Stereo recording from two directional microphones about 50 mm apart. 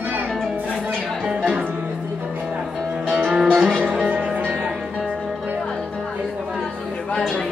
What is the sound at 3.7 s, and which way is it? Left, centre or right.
Music, right.